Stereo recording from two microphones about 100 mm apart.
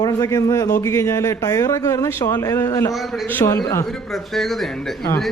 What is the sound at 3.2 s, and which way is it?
Speech, 20° left (ahead or behind).